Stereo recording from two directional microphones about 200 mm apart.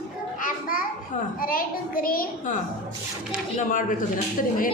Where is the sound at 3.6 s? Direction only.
40° left (ahead or behind).